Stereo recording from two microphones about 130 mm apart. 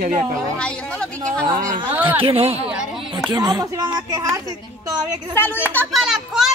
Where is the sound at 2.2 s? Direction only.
45° right (ahead or behind).